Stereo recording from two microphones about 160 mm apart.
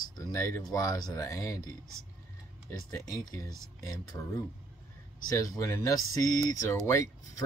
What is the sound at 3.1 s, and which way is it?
Speech, 20° left (ahead or behind).